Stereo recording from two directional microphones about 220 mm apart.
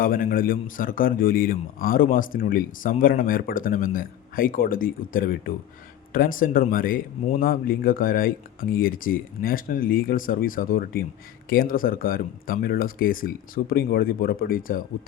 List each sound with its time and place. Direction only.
0.0 s a man's voice: 40° left (ahead or behind)